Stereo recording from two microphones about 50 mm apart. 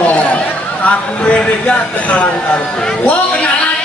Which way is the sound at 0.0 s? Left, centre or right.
Left.